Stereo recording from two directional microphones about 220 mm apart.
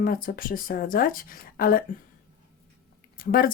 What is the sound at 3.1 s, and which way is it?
Speech, 40° left (ahead or behind).